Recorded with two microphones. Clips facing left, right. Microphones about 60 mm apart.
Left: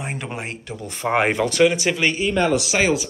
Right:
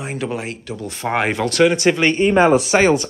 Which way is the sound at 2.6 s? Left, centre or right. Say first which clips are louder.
Right 5 dB; centre.